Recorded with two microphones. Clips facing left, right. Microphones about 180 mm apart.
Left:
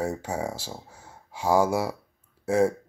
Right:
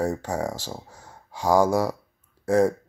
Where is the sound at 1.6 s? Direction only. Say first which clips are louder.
Right 3 dB; 10° left (ahead or behind).